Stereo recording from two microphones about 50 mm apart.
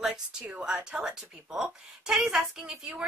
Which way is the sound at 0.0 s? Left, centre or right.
Centre.